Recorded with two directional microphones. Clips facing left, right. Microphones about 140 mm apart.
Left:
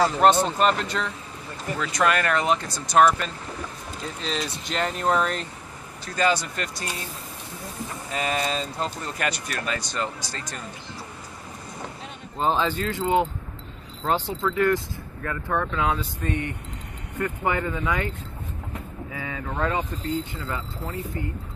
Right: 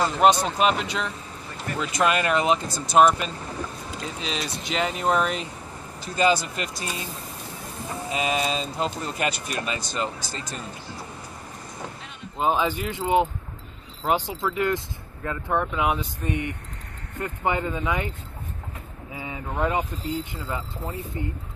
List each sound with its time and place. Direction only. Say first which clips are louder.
0.6 s speech: even; 10° right (ahead or behind)
1.8 s speech: even; 20° right (ahead or behind)
4.0 s speech: left 2 dB; 5° right (ahead or behind)
6.5 s speech: right 1 dB; 20° right (ahead or behind)
8.1 s speech: right 1 dB; 15° right (ahead or behind)
12.4 s speech: even; 10° right (ahead or behind)
19.1 s speech: right 1 dB; 20° right (ahead or behind)